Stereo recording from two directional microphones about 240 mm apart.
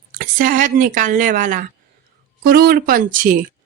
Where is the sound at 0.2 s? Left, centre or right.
Right.